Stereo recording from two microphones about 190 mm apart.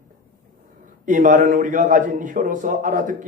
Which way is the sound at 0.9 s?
45° right (ahead or behind).